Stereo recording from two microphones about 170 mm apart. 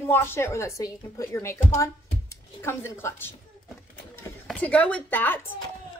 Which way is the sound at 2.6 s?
15° left (ahead or behind).